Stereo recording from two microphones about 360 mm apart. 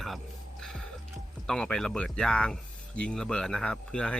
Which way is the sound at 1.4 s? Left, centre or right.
Centre.